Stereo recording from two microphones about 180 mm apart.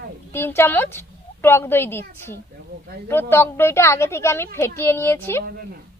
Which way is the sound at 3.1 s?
10° left (ahead or behind).